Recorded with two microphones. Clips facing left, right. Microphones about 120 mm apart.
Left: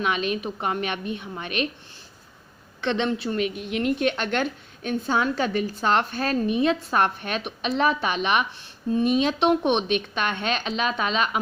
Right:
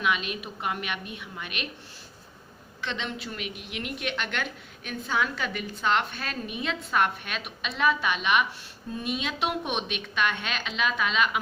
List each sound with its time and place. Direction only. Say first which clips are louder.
0.0 s a woman's voice: left 4 dB; 35° left (ahead or behind)
2.8 s a woman's voice: left 9 dB; 55° left (ahead or behind)
3.2 s a woman's voice: left 11 dB; 40° left (ahead or behind)